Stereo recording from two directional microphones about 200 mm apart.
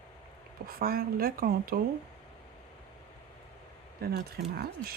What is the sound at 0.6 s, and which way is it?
Speech, 50° right (ahead or behind).